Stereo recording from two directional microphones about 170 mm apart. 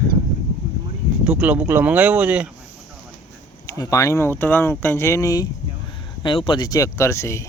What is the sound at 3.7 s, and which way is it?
Speech, 20° left (ahead or behind).